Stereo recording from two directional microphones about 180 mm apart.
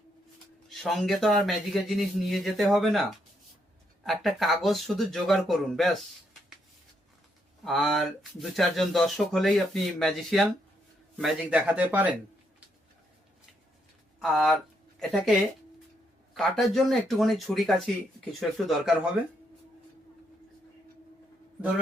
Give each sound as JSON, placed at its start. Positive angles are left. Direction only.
{"t": 0.7, "sound": "speech", "side_deg": 0}
{"t": 7.6, "sound": "speech", "side_deg": 0}
{"t": 14.2, "sound": "speech", "side_deg": 0}